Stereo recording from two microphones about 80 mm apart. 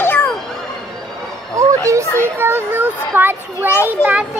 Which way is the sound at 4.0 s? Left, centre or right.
Left.